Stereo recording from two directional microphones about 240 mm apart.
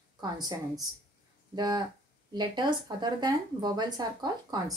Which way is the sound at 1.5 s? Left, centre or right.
Centre.